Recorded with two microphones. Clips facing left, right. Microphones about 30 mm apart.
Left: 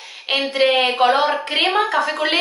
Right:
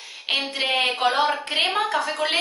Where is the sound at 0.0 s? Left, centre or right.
Centre.